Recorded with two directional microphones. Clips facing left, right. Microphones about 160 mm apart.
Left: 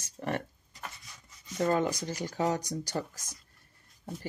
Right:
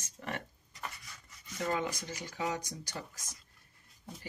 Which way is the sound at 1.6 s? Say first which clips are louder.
Left 7 dB; 45° left (ahead or behind).